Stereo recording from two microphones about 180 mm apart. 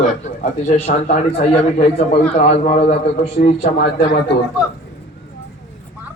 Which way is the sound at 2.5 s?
35° left (ahead or behind).